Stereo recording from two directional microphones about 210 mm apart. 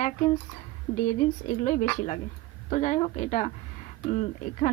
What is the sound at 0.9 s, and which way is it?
A woman's voice, 35° left (ahead or behind).